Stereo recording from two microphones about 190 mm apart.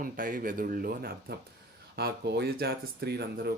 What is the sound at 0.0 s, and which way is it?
Speech, 45° right (ahead or behind).